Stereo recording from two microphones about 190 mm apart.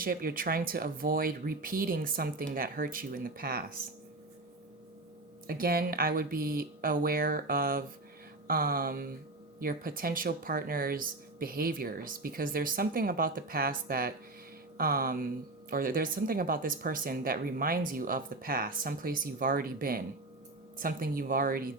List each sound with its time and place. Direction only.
0.0 s speech: 50° right (ahead or behind)
5.5 s speech: 50° right (ahead or behind)